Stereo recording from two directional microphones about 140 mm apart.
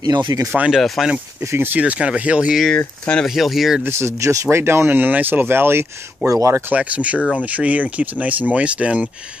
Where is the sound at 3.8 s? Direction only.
20° right (ahead or behind).